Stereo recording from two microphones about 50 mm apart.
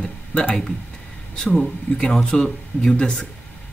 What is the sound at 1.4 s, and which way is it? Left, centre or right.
Speech, centre.